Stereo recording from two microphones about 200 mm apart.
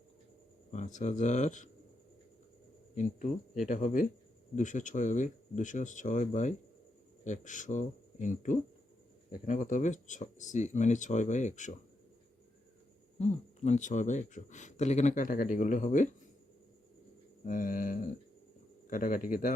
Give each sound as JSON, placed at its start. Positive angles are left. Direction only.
{"t": 0.7, "sound": "speech", "side_deg": 35}
{"t": 2.9, "sound": "speech", "side_deg": 40}
{"t": 13.1, "sound": "speech", "side_deg": 30}
{"t": 17.4, "sound": "bird", "side_deg": 45}